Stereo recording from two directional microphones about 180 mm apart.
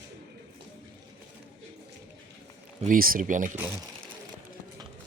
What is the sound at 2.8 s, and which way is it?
Speech, 50° right (ahead or behind).